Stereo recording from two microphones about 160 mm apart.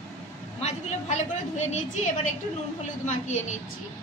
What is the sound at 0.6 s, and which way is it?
A woman's voice, 45° left (ahead or behind).